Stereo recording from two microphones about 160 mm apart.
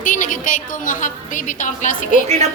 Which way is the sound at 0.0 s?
55° left (ahead or behind).